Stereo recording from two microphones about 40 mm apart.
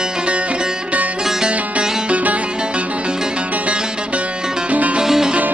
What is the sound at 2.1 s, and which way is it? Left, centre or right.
Music, right.